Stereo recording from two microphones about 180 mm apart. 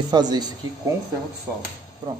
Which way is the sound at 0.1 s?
25° right (ahead or behind).